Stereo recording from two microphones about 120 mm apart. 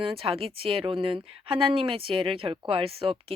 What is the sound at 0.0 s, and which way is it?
Speech, 50° right (ahead or behind).